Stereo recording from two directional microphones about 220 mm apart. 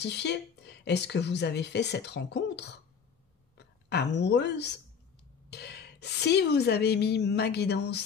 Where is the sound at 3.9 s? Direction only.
50° left (ahead or behind).